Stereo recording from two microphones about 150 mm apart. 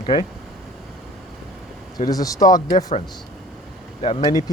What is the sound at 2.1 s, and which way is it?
Speech, 25° left (ahead or behind).